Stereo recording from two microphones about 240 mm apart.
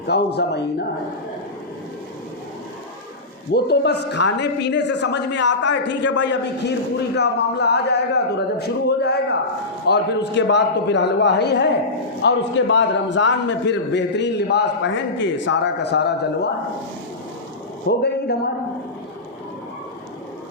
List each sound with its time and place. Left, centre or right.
0.1 s a man's voice: left
3.5 s a man's voice: left
17.8 s speech: left